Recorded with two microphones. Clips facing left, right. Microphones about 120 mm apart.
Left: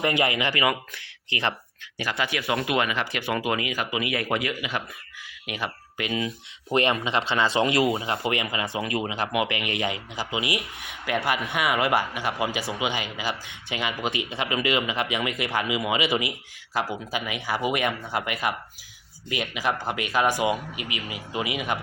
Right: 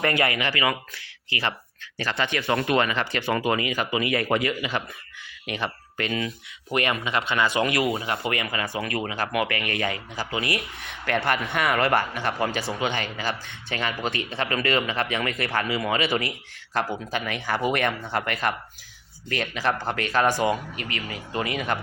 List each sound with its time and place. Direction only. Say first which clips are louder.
0.0 s speech: even; 20° left (ahead or behind)
2.0 s speech: right 1 dB; 10° left (ahead or behind)
6.7 s speech: left 2 dB; 30° left (ahead or behind); by 21.8 s 10° left (ahead or behind)